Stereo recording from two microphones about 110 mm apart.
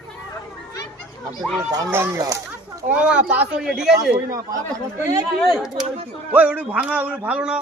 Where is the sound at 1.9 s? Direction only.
25° right (ahead or behind).